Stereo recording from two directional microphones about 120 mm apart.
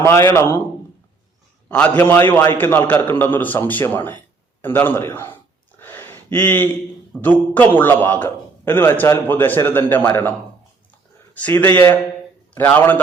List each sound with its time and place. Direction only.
0.0 s a man's voice: 20° left (ahead or behind)
1.7 s a man's voice: 10° left (ahead or behind)
5.8 s a sound: 20° left (ahead or behind)
7.2 s a man's voice: 15° left (ahead or behind)
11.4 s a man's voice: 15° left (ahead or behind)